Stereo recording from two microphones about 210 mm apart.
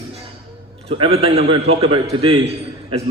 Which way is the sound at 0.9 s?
25° right (ahead or behind).